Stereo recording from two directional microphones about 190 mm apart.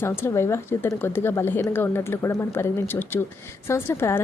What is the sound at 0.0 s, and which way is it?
Speech, 15° left (ahead or behind).